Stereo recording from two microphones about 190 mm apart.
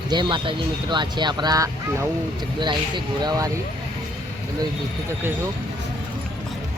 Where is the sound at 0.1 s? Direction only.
25° right (ahead or behind).